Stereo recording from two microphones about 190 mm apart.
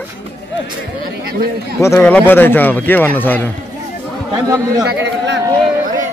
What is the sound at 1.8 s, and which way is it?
Speech, 10° left (ahead or behind).